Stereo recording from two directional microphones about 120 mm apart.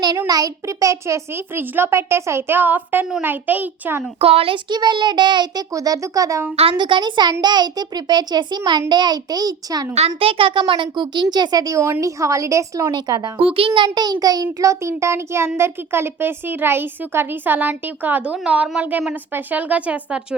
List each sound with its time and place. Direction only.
0.3 s a child's voice: 30° right (ahead or behind)
4.2 s a child's voice: 55° right (ahead or behind); by 6.4 s 30° right (ahead or behind)
6.6 s a child's voice: 45° right (ahead or behind)
10.2 s a child's voice: 50° right (ahead or behind); by 13.3 s 30° right (ahead or behind)
13.4 s a child's voice: 50° right (ahead or behind); by 20.2 s 10° right (ahead or behind)